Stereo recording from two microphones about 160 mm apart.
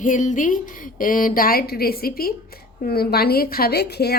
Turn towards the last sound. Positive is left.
turn(degrees=85)